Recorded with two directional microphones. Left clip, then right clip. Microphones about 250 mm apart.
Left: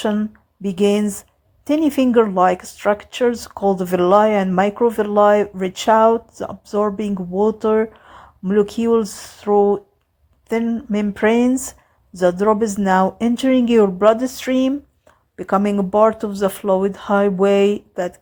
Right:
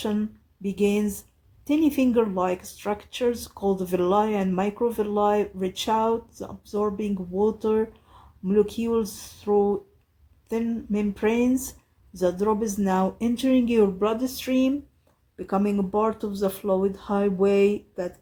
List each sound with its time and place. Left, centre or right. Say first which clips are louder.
0.0 s a woman's voice: left 8 dB; left